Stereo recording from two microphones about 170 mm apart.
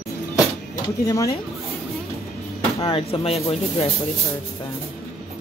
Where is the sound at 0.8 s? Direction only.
20° left (ahead or behind).